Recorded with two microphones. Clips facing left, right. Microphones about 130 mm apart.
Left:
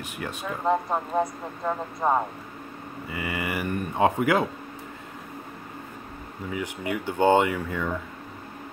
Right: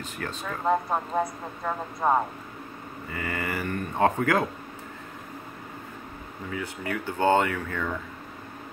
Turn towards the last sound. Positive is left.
turn(degrees=15)  # may be behind; listen again after turning